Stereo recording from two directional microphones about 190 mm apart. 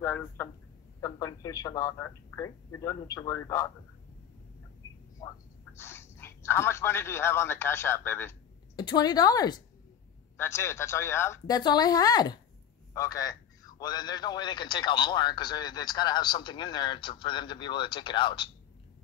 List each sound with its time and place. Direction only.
0.0 s speech: 10° left (ahead or behind)
5.2 s speech: 15° left (ahead or behind)
8.7 s a man's voice: 20° left (ahead or behind)